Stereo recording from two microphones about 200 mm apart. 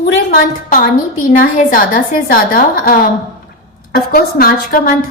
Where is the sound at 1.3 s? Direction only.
45° left (ahead or behind).